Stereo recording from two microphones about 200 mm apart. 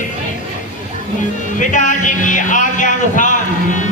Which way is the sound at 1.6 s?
40° left (ahead or behind).